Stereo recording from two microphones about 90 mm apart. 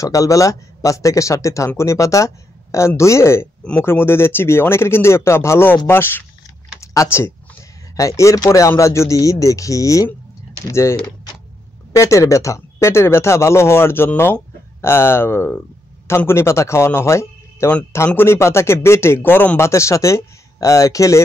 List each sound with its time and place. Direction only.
0.0 s speech: 40° left (ahead or behind)